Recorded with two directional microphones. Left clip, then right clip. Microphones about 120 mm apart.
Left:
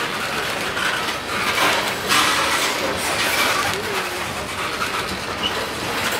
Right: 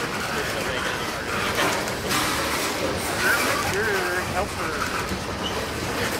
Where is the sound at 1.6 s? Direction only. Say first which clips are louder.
Left 6 dB; 45° left (ahead or behind).